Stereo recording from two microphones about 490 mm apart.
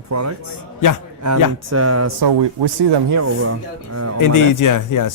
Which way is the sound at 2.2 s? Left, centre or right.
Right.